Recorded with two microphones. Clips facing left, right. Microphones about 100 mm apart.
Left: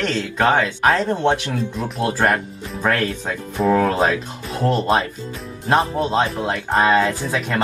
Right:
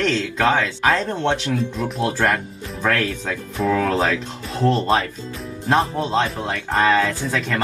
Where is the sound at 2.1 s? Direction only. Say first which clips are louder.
Left 2 dB; 35° left (ahead or behind).